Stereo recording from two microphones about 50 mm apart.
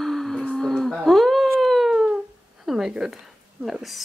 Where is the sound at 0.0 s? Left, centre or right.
Centre.